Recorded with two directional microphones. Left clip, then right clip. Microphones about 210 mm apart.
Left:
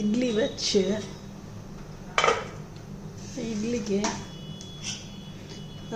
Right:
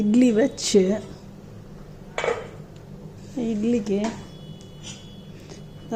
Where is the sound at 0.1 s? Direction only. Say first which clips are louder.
Right 7 dB; 40° right (ahead or behind).